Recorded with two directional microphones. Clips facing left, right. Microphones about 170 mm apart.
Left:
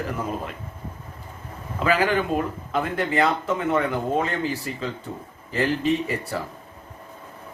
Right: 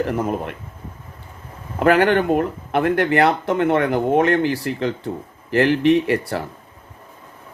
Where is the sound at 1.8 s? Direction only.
65° right (ahead or behind).